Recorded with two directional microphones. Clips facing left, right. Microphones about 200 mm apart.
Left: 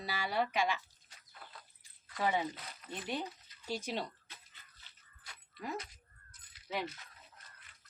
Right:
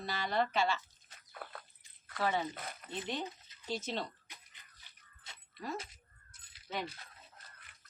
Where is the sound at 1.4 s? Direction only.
65° right (ahead or behind).